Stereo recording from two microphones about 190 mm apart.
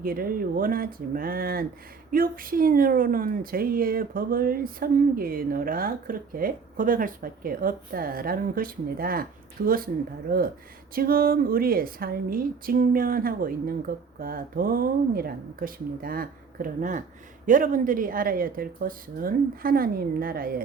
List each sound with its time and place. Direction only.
0.0 s a woman's voice: 50° right (ahead or behind)